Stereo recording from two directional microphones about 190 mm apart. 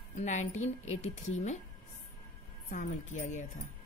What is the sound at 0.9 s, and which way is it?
Speech, 90° left.